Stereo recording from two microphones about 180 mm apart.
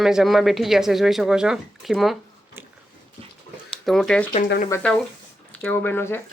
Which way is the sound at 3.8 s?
Centre (ahead or behind).